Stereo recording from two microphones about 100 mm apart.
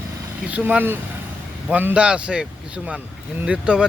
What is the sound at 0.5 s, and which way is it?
Speech, 15° right (ahead or behind).